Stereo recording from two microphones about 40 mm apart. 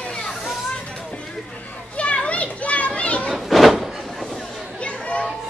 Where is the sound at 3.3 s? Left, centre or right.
Centre.